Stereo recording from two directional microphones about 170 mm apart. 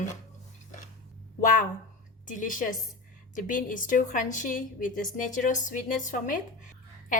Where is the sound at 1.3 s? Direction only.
50° left (ahead or behind).